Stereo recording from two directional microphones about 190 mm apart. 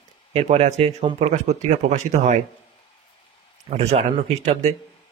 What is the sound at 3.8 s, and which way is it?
Speech, 35° right (ahead or behind).